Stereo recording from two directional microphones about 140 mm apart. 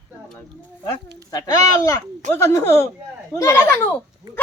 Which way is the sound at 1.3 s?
25° left (ahead or behind).